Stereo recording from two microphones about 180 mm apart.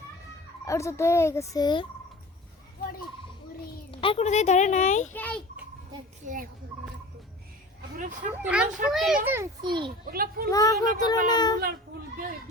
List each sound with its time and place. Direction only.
0.6 s speech: 15° left (ahead or behind)
3.9 s speech: 30° left (ahead or behind)
5.1 s speech: 10° left (ahead or behind)
6.2 s speech: 50° right (ahead or behind)
8.3 s a child's voice: 5° right (ahead or behind)
9.6 s a child's voice: 25° right (ahead or behind)
10.1 s a child's voice: 55° right (ahead or behind)
10.5 s speech: 20° left (ahead or behind)